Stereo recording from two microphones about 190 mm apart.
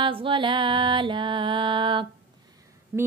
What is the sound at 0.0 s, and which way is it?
Music, 25° right (ahead or behind).